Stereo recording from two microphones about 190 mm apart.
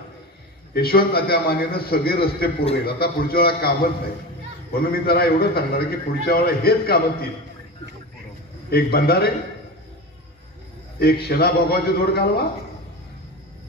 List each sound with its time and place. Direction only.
0.7 s a man's voice: 55° left (ahead or behind)
4.7 s a man's voice: 55° left (ahead or behind)
8.6 s a man's voice: 55° left (ahead or behind)
11.0 s a man's voice: 55° left (ahead or behind)